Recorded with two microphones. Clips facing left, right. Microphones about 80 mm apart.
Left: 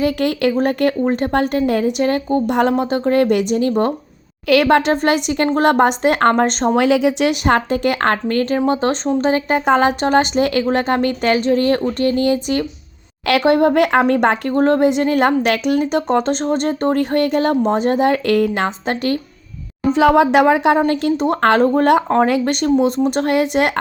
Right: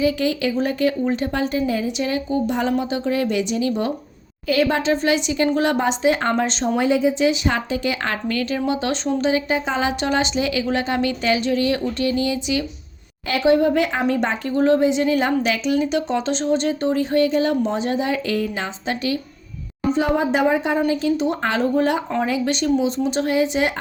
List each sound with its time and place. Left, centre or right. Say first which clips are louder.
0.0 s a woman's voice: left 3 dB; left
4.4 s a woman's voice: left 6 dB; left
6.7 s a woman's voice: left 3 dB; left
13.2 s a woman's voice: left 3 dB; left
19.9 s speech: left 7 dB; left